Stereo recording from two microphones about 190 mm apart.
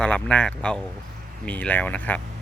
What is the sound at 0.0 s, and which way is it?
Speech, 5° left (ahead or behind).